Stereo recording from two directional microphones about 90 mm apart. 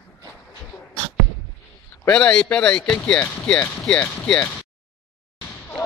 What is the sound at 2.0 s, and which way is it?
Speech, 10° left (ahead or behind).